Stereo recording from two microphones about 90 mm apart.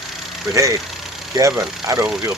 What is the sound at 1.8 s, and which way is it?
Speech, 40° right (ahead or behind).